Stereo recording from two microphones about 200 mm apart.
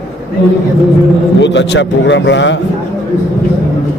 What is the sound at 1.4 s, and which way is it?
A man's voice, 60° left (ahead or behind).